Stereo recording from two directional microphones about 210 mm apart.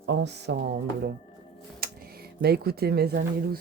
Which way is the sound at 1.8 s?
45° right (ahead or behind).